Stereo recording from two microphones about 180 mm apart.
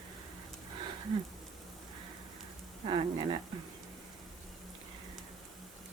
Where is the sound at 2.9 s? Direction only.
30° right (ahead or behind).